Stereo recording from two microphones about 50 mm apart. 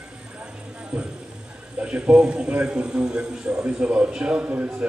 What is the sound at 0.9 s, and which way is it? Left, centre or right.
A man's voice, centre.